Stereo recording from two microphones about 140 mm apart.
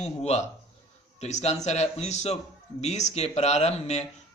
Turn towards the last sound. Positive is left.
turn(degrees=50)  # may be behind; listen again after turning